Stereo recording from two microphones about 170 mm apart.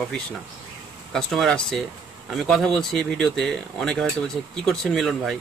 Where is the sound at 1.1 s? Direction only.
5° left (ahead or behind).